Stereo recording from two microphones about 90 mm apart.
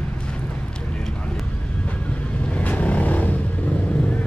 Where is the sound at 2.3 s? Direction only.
15° left (ahead or behind).